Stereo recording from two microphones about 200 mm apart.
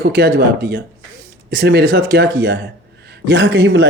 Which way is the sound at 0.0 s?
50° right (ahead or behind).